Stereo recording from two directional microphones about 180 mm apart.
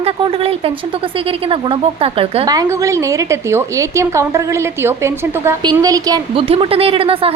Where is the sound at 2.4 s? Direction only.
20° right (ahead or behind).